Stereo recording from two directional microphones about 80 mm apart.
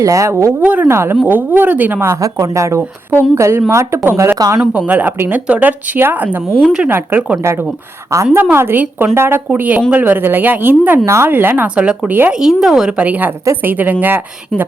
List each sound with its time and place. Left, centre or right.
0.0 s speech: right
0.6 s speech: centre
0.9 s speech: right
2.2 s speech: right
4.4 s speech: right
4.6 s speech: centre
8.1 s speech: right
8.5 s speech: right
9.5 s speech: centre
11.0 s speech: right
11.3 s speech: right
12.3 s a woman's voice: centre
13.1 s speech: right